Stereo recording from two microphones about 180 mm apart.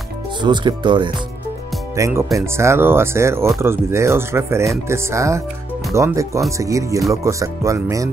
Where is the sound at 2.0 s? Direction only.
15° right (ahead or behind).